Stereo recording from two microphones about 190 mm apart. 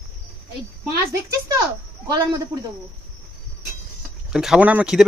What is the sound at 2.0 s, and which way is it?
Speech, 20° right (ahead or behind).